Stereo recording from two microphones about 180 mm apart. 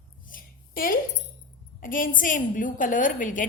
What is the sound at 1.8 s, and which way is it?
A woman's voice, 50° left (ahead or behind).